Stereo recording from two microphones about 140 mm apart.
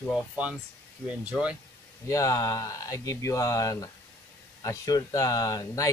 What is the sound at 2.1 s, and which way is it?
Speech, 25° left (ahead or behind).